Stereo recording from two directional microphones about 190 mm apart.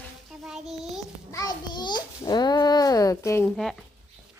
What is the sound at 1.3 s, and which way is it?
Babbling, 20° left (ahead or behind).